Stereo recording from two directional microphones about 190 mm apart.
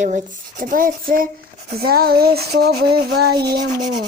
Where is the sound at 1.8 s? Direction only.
55° right (ahead or behind).